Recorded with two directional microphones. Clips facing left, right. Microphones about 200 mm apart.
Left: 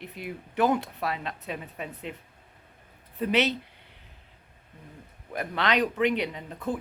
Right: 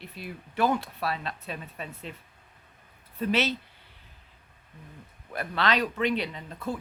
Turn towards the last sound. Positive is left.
turn(degrees=15)  # may be behind; listen again after turning